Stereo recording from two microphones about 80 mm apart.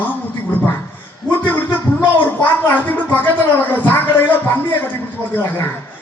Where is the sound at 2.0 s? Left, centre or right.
Left.